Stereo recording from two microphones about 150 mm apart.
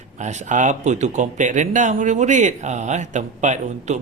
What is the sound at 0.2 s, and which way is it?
Speech, 55° right (ahead or behind).